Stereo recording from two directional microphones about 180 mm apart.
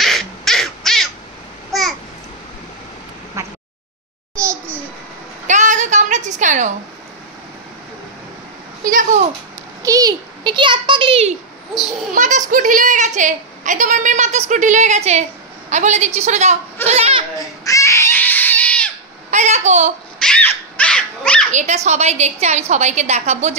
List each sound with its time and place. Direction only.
0.0 s crow: centre (ahead or behind)
1.7 s babbling: centre (ahead or behind)
3.4 s a sound: 15° right (ahead or behind)
5.5 s a sound: 45° right (ahead or behind)
8.8 s speech: 45° right (ahead or behind)
9.8 s a child's voice: 20° right (ahead or behind)
12.1 s a child's voice: 45° right (ahead or behind)
16.8 s goat: 35° right (ahead or behind)
17.6 s a sound: 15° left (ahead or behind)
19.3 s a woman's voice: 40° right (ahead or behind)
20.2 s dog: 5° left (ahead or behind)
21.5 s a woman's voice: 40° right (ahead or behind)